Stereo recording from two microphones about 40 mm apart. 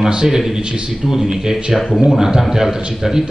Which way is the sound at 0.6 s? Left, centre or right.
Right.